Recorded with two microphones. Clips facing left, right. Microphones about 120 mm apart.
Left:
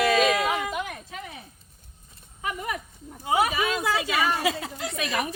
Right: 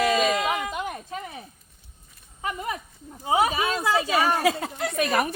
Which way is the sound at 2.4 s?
30° right (ahead or behind).